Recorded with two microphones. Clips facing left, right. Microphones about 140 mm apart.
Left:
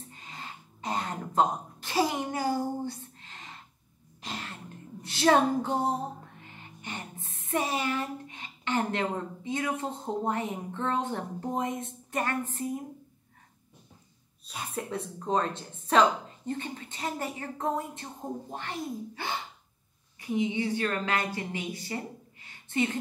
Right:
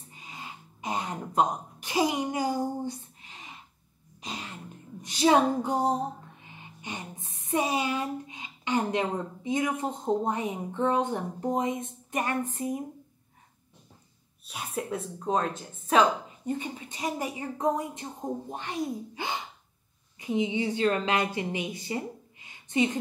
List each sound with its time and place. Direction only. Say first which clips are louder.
0.1 s a sound: right 5 dB; 10° right (ahead or behind)
4.3 s throat clearing: even; 15° right (ahead or behind)
5.0 s speech: right 1 dB; 15° right (ahead or behind)
14.4 s a woman's voice: right 2 dB; 5° right (ahead or behind)